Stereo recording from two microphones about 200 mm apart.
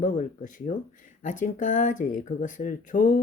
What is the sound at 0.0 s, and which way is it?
Speech, 40° left (ahead or behind).